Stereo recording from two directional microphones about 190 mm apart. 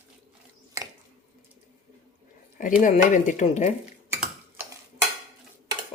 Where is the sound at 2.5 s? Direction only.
45° left (ahead or behind).